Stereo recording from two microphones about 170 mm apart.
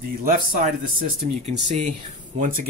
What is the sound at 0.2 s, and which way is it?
Speech, 60° right (ahead or behind).